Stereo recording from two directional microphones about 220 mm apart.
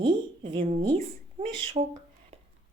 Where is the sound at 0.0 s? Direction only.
20° right (ahead or behind).